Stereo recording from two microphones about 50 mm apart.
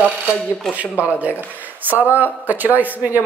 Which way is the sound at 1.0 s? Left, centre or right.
Right.